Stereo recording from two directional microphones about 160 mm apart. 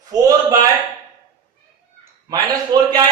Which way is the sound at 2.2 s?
25° right (ahead or behind).